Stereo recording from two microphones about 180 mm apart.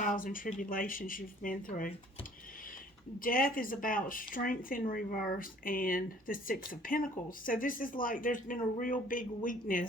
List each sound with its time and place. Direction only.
0.0 s speech: 45° left (ahead or behind)
3.2 s speech: 50° left (ahead or behind)